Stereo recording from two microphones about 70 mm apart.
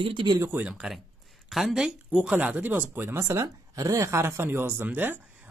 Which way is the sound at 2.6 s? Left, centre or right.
Right.